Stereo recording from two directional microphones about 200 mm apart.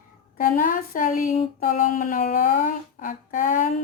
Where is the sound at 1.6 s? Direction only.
45° left (ahead or behind).